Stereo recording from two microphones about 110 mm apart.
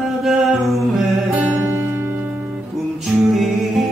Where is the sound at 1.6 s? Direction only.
20° right (ahead or behind).